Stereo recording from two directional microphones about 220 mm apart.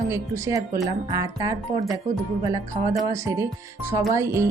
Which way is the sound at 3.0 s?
15° right (ahead or behind).